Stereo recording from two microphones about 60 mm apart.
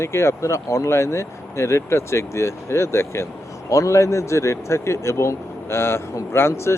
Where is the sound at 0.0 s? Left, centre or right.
Left.